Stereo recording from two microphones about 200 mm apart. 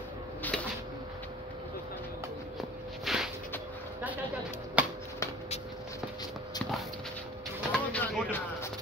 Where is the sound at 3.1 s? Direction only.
Centre (ahead or behind).